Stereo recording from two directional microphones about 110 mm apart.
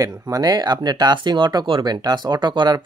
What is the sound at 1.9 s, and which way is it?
Speech, 40° right (ahead or behind).